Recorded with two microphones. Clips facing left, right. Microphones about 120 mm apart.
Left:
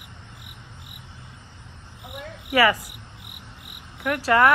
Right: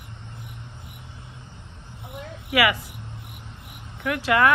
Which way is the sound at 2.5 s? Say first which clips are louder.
Left 2 dB; 40° left (ahead or behind).